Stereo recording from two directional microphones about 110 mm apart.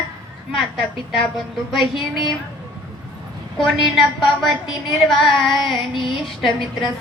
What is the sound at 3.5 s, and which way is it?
Speech, centre (ahead or behind).